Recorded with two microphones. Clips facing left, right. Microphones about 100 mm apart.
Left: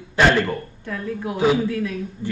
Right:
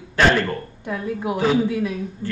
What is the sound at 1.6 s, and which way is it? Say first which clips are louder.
Speech: right 1 dB; 15° right (ahead or behind).